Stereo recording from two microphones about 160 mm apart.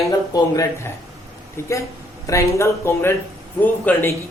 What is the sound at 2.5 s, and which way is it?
A man's voice, 15° left (ahead or behind).